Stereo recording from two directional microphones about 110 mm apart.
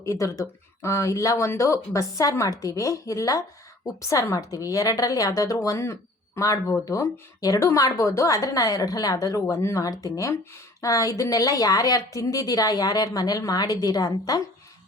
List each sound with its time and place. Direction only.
0.0 s a woman's voice: 30° left (ahead or behind)